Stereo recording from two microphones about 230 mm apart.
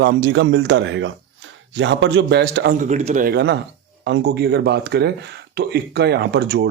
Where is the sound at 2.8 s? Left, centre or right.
Right.